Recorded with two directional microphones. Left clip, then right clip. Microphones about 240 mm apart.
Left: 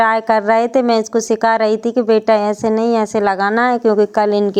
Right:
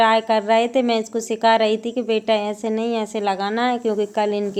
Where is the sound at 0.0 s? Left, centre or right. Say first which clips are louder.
Left 3 dB; left.